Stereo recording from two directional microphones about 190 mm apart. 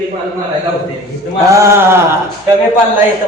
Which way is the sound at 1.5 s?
15° right (ahead or behind).